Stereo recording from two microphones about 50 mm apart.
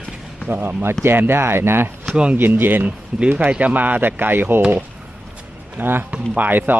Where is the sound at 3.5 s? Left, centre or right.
Right.